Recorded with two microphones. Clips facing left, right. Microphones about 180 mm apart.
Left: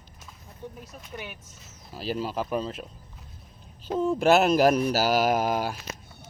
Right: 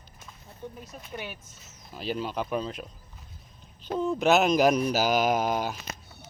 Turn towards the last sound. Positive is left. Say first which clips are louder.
# left 1 dB
turn(degrees=5)  # may be behind; listen again after turning